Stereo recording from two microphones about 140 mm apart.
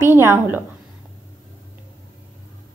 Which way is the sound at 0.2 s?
15° right (ahead or behind).